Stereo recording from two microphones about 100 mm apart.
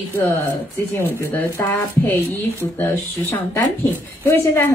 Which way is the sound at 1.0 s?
20° left (ahead or behind).